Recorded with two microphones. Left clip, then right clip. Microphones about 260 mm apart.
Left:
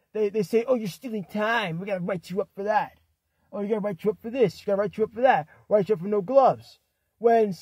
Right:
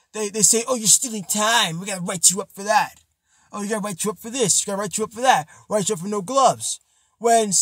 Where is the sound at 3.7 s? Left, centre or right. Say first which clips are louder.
Even; centre.